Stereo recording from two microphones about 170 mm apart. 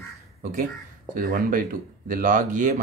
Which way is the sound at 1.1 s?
55° right (ahead or behind).